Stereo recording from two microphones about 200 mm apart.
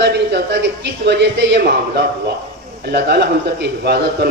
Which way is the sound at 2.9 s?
55° right (ahead or behind).